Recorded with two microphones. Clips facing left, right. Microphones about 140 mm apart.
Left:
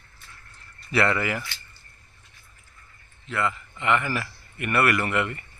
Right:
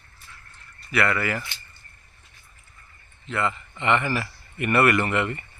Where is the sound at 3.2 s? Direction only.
Centre (ahead or behind).